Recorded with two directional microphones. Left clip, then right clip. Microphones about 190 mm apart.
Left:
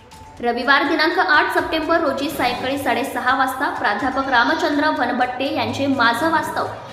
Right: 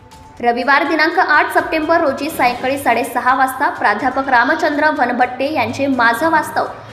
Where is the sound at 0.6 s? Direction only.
15° right (ahead or behind).